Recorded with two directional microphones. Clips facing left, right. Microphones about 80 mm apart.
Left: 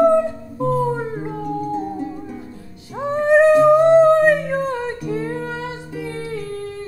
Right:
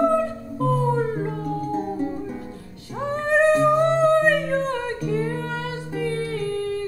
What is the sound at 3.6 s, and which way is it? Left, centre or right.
Humming, centre.